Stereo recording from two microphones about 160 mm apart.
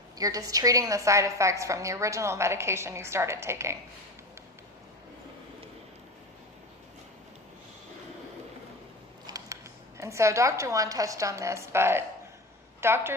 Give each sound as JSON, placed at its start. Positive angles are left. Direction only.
{"t": 0.2, "sound": "a woman's voice", "side_deg": -20}
{"t": 9.2, "sound": "a sound", "side_deg": -20}
{"t": 10.0, "sound": "a woman's voice", "side_deg": -20}